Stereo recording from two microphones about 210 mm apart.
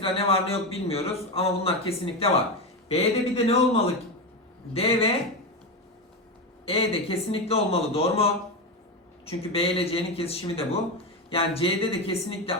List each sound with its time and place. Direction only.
0.0 s a man's voice: 25° left (ahead or behind)
4.7 s a man's voice: 25° left (ahead or behind)
6.7 s a man's voice: 25° left (ahead or behind)